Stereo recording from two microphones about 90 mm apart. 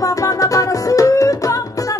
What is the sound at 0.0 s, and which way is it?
Music, 40° left (ahead or behind).